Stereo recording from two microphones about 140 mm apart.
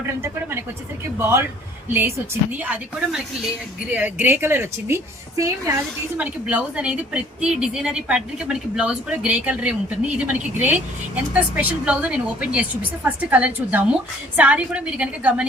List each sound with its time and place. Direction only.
1.2 s a woman's voice: 15° right (ahead or behind)
6.1 s a woman's voice: 10° right (ahead or behind)